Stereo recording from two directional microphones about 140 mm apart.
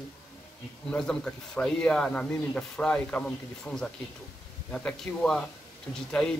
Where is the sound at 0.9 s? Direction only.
5° left (ahead or behind).